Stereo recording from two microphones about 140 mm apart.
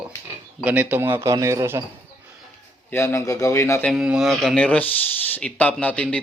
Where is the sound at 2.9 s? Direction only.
20° left (ahead or behind).